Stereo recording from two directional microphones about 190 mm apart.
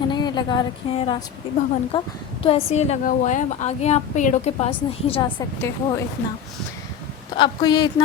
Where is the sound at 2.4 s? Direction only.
35° left (ahead or behind).